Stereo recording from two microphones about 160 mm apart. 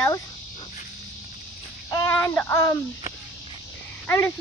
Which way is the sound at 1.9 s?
15° left (ahead or behind).